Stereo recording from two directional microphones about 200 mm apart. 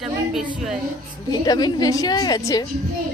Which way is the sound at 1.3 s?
20° left (ahead or behind).